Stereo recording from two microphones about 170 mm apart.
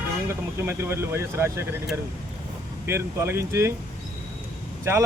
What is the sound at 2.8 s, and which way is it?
Speech, 15° right (ahead or behind).